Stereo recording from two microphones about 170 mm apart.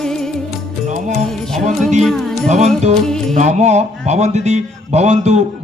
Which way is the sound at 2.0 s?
5° left (ahead or behind).